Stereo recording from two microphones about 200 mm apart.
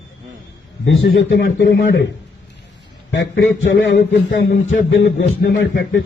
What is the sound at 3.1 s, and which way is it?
A man's voice, 65° left (ahead or behind).